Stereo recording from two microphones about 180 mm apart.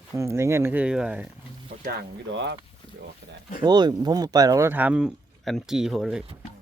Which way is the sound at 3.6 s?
25° right (ahead or behind).